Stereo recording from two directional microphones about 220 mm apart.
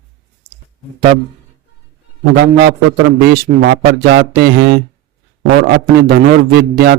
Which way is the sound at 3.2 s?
45° right (ahead or behind).